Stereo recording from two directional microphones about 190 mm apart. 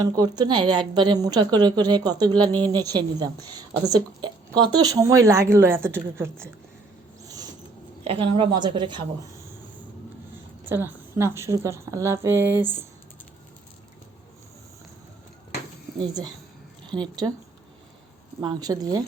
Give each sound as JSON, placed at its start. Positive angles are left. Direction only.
{"t": 0.0, "sound": "a woman's voice", "side_deg": -20}
{"t": 8.0, "sound": "a woman's voice", "side_deg": -30}
{"t": 10.7, "sound": "a woman's voice", "side_deg": -10}
{"t": 16.0, "sound": "a woman's voice", "side_deg": -20}
{"t": 18.3, "sound": "a woman's voice", "side_deg": -20}